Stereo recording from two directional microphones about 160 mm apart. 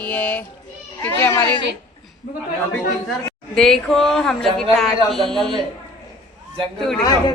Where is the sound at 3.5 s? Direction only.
5° left (ahead or behind).